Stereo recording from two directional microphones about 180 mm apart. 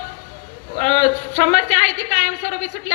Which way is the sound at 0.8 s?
40° left (ahead or behind).